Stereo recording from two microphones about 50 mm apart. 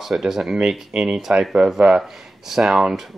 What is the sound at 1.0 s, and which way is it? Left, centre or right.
Speech, centre.